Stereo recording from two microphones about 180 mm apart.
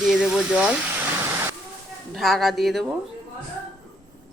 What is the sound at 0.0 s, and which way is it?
Speech, 5° right (ahead or behind).